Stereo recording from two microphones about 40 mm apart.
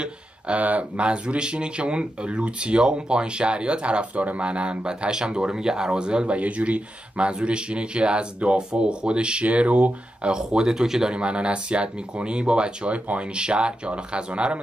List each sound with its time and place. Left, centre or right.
0.0 s speech: right
10.2 s speech: right
11.1 s speech: right